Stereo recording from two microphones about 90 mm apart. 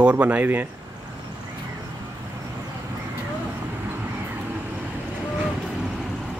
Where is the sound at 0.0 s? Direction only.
15° right (ahead or behind).